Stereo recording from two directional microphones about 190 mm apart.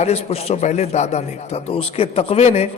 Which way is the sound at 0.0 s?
35° left (ahead or behind).